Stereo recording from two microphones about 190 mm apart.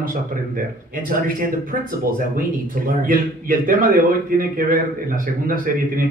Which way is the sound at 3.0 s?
45° right (ahead or behind).